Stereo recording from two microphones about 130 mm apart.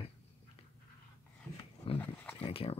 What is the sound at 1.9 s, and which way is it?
Dog, 45° left (ahead or behind).